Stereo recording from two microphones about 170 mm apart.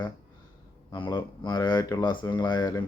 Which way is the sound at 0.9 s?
25° left (ahead or behind).